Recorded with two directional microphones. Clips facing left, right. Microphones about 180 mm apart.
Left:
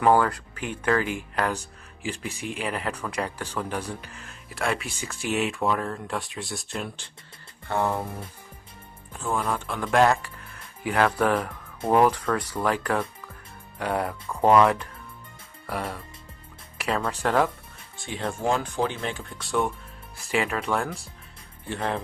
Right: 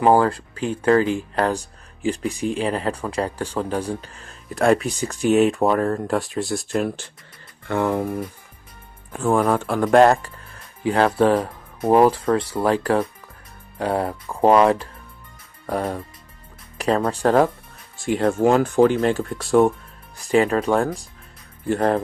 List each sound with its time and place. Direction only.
0.0 s speech: 30° right (ahead or behind); by 6.2 s 45° right (ahead or behind)
6.4 s speech: centre (ahead or behind)
6.7 s speech: 50° right (ahead or behind)
7.7 s speech: 65° right (ahead or behind)
9.1 s speech: 55° right (ahead or behind); by 17.5 s 35° right (ahead or behind)
17.9 s speech: centre (ahead or behind)
18.2 s speech: 60° right (ahead or behind); by 21.1 s 35° right (ahead or behind)
21.7 s speech: 50° right (ahead or behind)